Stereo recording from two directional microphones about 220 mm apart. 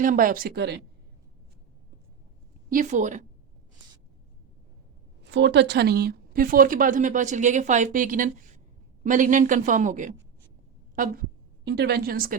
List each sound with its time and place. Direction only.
0.0 s speech: 40° right (ahead or behind)
2.6 s speech: 35° right (ahead or behind)
5.2 s a woman's voice: 55° right (ahead or behind)